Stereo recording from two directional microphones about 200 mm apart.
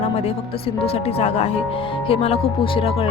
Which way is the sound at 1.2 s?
30° left (ahead or behind).